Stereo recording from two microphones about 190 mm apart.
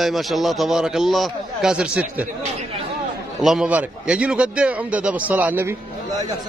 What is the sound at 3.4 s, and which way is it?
A man's voice, 5° right (ahead or behind).